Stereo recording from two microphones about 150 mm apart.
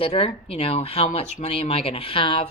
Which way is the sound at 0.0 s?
45° left (ahead or behind).